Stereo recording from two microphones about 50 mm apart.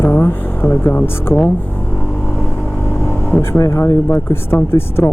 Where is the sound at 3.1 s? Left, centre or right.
Left.